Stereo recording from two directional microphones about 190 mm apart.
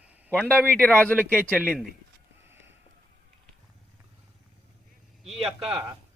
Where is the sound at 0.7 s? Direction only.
10° left (ahead or behind).